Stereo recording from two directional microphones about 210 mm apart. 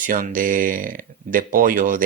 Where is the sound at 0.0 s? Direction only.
40° right (ahead or behind).